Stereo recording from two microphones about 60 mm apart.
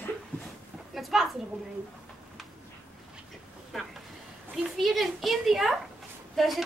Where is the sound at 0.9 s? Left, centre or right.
Centre.